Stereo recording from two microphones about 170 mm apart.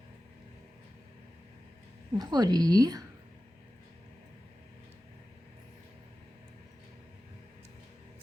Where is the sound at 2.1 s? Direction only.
25° right (ahead or behind).